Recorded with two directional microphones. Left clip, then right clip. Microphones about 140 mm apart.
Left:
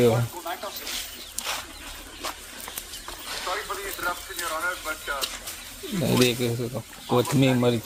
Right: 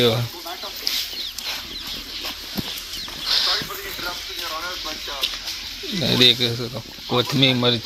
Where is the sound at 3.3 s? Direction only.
Centre (ahead or behind).